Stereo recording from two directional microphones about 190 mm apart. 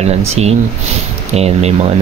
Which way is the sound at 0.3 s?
35° right (ahead or behind).